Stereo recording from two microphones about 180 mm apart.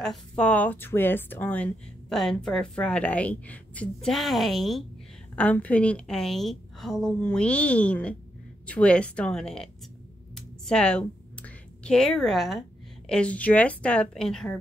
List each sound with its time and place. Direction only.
0.0 s speech: 5° left (ahead or behind)